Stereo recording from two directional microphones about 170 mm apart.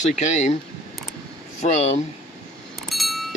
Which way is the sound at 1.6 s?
40° left (ahead or behind).